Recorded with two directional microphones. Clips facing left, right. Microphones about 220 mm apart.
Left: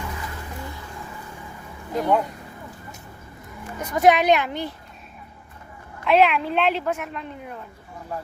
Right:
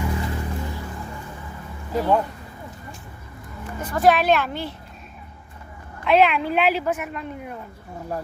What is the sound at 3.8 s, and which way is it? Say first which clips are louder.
Speech: left 1 dB; 20° left (ahead or behind).